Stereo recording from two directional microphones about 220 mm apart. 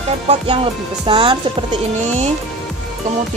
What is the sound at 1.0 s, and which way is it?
Speech, 25° right (ahead or behind).